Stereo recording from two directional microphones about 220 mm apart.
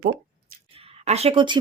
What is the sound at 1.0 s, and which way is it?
Speech, 30° right (ahead or behind).